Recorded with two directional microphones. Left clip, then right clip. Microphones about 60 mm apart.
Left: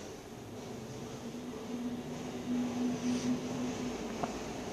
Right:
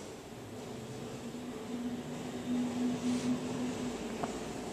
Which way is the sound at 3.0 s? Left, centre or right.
Left.